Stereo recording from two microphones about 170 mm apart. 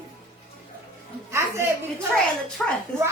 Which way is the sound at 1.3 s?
15° right (ahead or behind).